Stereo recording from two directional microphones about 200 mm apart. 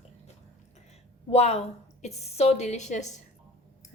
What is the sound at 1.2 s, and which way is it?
A woman's voice, 30° left (ahead or behind).